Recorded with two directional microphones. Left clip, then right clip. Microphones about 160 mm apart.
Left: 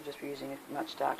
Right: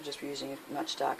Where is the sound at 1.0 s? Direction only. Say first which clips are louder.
Even; 65° right (ahead or behind).